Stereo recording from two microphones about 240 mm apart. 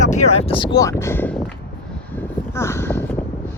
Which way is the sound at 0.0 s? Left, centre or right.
Left.